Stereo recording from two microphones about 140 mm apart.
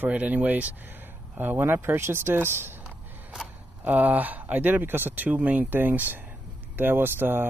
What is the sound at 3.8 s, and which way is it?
Speech, 10° right (ahead or behind).